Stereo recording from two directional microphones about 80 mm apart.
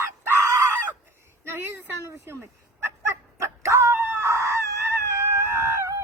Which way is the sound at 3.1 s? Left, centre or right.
Right.